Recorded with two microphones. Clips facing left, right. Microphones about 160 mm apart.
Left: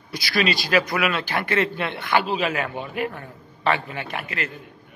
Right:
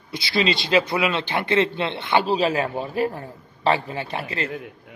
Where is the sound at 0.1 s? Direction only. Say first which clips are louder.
Right 1 dB; 25° right (ahead or behind).